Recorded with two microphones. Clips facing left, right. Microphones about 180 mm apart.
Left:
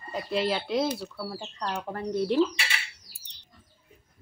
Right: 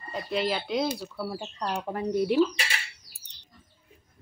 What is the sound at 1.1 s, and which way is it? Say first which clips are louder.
Speech: right 2 dB; 15° right (ahead or behind).